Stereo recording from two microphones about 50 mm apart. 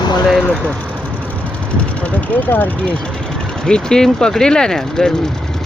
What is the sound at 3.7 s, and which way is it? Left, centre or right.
Speech, centre.